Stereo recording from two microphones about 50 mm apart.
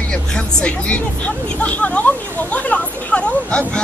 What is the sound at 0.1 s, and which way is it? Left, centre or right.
Speech, centre.